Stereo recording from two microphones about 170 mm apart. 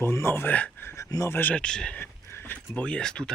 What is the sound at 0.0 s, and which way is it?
Speech, 15° left (ahead or behind).